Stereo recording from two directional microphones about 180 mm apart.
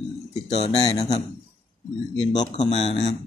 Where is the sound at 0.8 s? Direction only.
20° left (ahead or behind).